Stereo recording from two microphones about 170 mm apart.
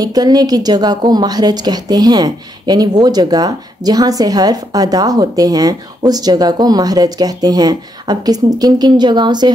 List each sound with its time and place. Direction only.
0.0 s speech: 25° right (ahead or behind)